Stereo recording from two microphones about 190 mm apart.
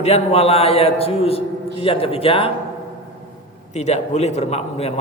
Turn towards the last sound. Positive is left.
turn(degrees=35)  # may be behind; listen again after turning